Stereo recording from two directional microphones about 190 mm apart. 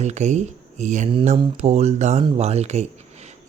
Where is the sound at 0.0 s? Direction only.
35° right (ahead or behind).